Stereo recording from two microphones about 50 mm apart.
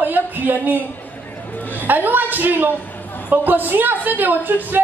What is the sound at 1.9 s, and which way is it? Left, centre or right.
A man's voice, right.